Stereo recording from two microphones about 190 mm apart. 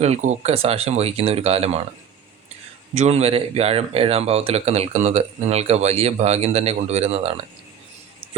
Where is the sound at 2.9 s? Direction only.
35° right (ahead or behind).